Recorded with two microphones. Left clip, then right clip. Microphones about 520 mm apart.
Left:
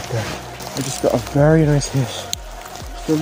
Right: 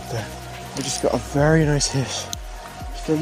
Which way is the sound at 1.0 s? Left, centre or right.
Right.